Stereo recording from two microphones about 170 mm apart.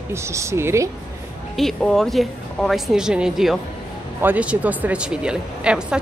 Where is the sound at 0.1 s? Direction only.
15° right (ahead or behind).